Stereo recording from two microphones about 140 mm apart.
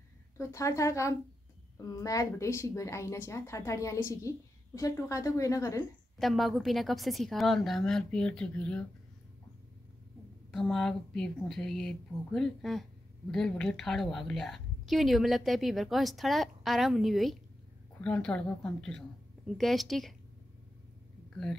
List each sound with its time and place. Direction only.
0.4 s a woman's voice: 20° left (ahead or behind)
6.1 s a woman's voice: centre (ahead or behind)
10.5 s a woman's voice: centre (ahead or behind)